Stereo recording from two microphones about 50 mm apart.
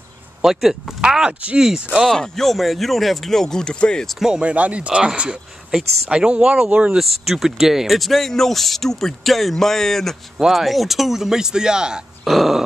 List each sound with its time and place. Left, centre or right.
0.4 s speech: centre
1.0 s speech: centre
1.6 s speech: centre
2.0 s speech: centre
4.2 s speech: centre
7.0 s speech: centre
12.3 s speech: centre